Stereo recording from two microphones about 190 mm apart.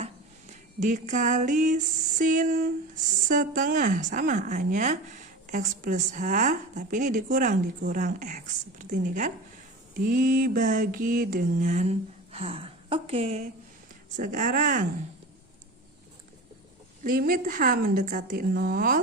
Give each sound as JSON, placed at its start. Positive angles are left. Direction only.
{"t": 0.0, "sound": "a sound", "side_deg": -40}
{"t": 3.2, "sound": "mantra", "side_deg": -45}
{"t": 17.0, "sound": "mantra", "side_deg": -50}